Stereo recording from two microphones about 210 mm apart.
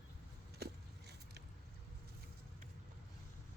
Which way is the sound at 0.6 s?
50° right (ahead or behind).